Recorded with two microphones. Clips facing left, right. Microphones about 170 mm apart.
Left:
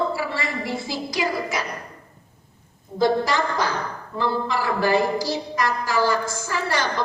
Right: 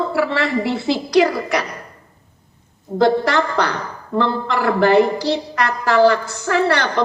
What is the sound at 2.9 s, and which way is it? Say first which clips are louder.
A woman's voice: right 5 dB; 65° right (ahead or behind).